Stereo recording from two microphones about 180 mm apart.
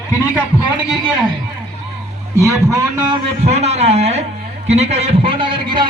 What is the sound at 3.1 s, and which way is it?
A man's voice, 35° right (ahead or behind).